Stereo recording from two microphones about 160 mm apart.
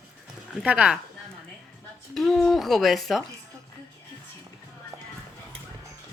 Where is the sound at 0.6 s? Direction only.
5° right (ahead or behind).